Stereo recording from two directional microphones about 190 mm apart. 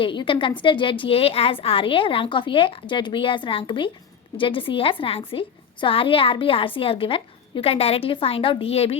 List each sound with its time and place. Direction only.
0.0 s a woman's voice: 25° left (ahead or behind)